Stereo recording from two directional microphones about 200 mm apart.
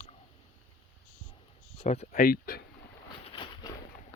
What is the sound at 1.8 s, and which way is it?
Speech, 35° left (ahead or behind).